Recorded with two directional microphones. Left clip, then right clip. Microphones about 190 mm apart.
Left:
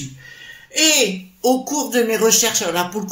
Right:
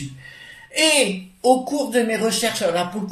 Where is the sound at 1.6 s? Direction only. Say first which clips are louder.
Left 2 dB; 40° left (ahead or behind).